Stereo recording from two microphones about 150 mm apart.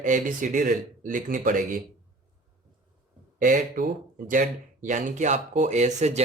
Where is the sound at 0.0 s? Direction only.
60° right (ahead or behind).